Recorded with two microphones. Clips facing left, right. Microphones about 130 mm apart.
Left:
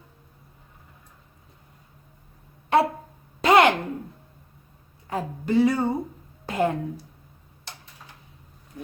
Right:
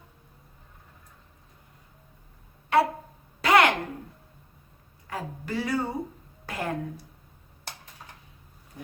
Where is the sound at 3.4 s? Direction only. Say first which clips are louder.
Left 3 dB; 25° left (ahead or behind).